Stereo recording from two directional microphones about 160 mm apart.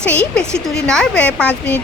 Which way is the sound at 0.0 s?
10° left (ahead or behind).